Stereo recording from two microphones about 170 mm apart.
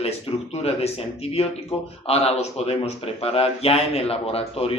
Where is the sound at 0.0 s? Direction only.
35° left (ahead or behind).